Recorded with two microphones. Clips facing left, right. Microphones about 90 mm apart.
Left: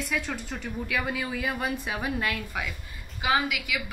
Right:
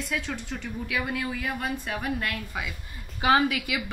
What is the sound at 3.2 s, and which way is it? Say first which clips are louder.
Speech: right 4 dB; 40° right (ahead or behind).